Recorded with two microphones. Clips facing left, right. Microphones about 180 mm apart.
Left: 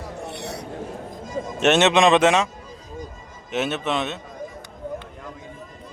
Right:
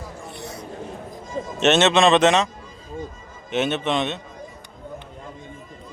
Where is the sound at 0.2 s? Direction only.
70° left (ahead or behind).